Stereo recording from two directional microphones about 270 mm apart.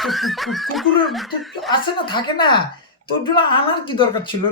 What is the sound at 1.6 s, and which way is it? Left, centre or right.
Speech, centre.